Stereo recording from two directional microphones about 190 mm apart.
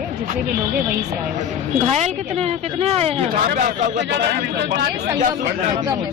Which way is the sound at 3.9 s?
65° right (ahead or behind).